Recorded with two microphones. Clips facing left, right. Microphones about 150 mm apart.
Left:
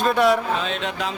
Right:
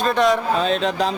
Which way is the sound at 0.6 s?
35° right (ahead or behind).